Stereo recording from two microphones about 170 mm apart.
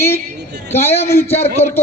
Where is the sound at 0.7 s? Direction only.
40° left (ahead or behind).